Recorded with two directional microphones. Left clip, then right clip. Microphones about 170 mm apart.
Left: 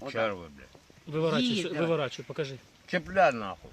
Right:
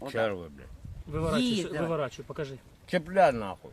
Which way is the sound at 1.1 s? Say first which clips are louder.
Left 3 dB; 50° left (ahead or behind).